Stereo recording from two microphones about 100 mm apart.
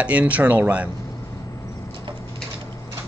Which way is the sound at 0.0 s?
15° right (ahead or behind).